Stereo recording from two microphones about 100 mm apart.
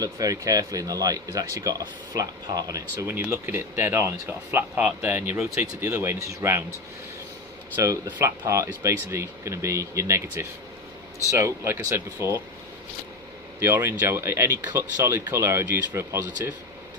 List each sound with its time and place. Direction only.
0.0 s speech: 35° right (ahead or behind)
3.1 s speech: 25° right (ahead or behind)
8.2 s speech: 30° right (ahead or behind)
13.6 s speech: 25° right (ahead or behind)